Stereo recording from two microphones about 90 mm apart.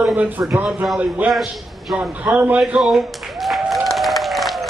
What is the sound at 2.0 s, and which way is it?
Speech, 15° right (ahead or behind).